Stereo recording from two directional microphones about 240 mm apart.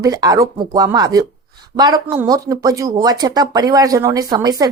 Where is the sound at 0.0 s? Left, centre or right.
Centre.